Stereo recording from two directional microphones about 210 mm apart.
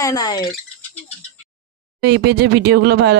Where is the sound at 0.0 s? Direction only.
15° left (ahead or behind).